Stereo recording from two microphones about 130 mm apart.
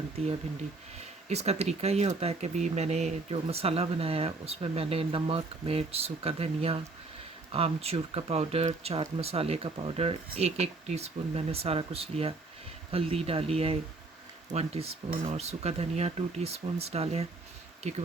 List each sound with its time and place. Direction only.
0.2 s speech: 50° right (ahead or behind)